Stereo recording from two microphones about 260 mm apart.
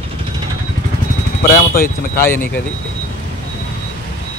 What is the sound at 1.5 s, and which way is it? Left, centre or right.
Speech, left.